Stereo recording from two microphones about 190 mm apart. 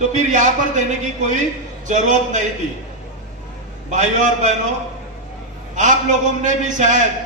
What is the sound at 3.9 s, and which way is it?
Speech, 40° right (ahead or behind).